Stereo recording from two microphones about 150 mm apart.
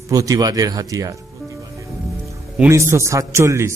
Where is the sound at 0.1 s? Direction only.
25° right (ahead or behind).